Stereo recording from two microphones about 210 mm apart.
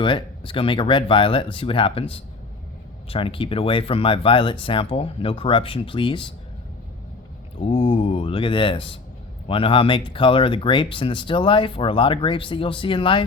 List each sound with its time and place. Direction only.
0.0 s speech: 25° left (ahead or behind)
7.6 s speech: 25° left (ahead or behind)